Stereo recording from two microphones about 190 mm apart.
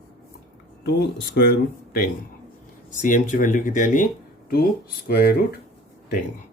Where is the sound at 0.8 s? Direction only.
60° left (ahead or behind).